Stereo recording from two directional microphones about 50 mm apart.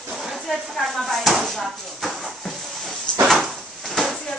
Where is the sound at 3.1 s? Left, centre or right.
Centre.